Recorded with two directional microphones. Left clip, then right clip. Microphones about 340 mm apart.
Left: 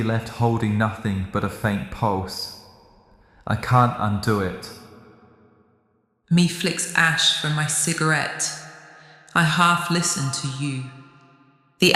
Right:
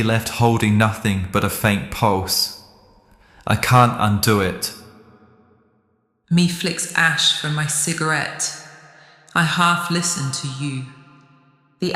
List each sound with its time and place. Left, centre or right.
0.0 s speech: right
3.4 s speech: right
6.2 s speech: centre
11.8 s speech: left